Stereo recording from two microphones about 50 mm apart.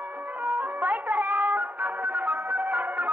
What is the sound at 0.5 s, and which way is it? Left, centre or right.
Music, right.